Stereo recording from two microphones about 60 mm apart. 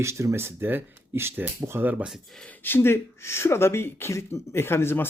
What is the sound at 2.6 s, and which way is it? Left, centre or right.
Speech, left.